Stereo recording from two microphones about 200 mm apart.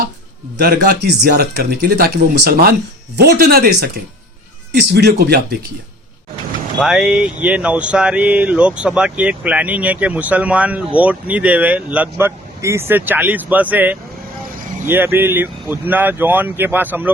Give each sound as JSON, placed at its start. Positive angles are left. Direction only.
{"t": 0.6, "sound": "speech", "side_deg": -50}
{"t": 6.7, "sound": "speech", "side_deg": -5}